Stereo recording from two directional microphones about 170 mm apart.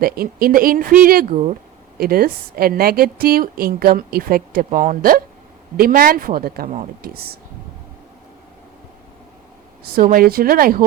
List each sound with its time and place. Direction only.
0.0 s a woman's voice: 60° right (ahead or behind)
9.9 s a woman's voice: 55° right (ahead or behind)